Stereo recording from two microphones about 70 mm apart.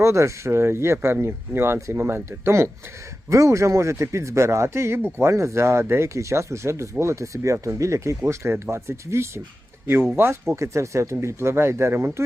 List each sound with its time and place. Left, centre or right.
0.0 s speech: right